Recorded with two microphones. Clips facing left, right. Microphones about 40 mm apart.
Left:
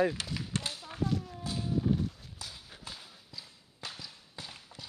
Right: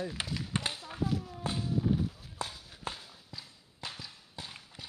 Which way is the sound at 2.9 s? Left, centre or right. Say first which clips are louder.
Right 7 dB; right.